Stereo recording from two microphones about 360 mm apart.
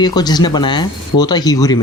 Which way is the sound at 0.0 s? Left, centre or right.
Centre.